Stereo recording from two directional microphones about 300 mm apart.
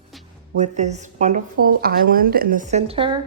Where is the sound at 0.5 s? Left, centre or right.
Right.